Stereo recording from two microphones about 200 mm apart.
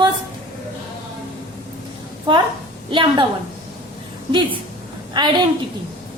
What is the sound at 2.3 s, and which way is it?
Speech, 25° right (ahead or behind).